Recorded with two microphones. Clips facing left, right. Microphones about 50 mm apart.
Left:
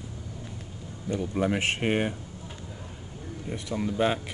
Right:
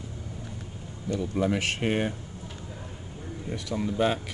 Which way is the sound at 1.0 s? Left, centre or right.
Left.